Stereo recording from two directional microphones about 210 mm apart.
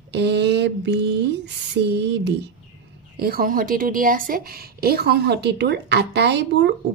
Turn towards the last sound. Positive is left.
turn(degrees=-55)  # may be behind; listen again after turning